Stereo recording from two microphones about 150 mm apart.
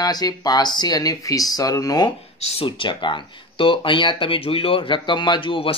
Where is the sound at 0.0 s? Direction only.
25° left (ahead or behind).